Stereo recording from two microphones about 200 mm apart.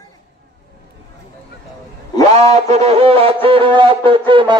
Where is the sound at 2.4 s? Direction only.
35° right (ahead or behind).